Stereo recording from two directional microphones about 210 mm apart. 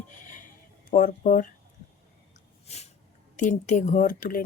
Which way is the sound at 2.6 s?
30° left (ahead or behind).